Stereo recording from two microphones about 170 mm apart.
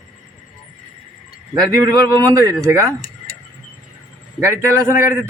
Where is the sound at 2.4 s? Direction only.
20° right (ahead or behind).